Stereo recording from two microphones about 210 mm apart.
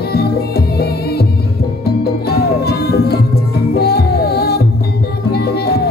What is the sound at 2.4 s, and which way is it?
Music, 50° left (ahead or behind).